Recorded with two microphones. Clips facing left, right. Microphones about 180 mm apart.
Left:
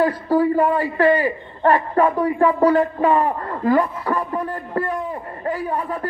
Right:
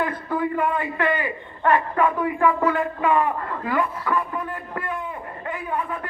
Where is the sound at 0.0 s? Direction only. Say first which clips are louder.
Left 7 dB; 35° left (ahead or behind).